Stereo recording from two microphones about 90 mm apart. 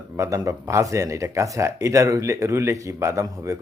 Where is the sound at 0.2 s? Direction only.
35° right (ahead or behind).